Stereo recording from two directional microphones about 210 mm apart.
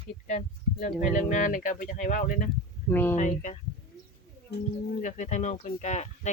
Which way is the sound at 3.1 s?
35° left (ahead or behind).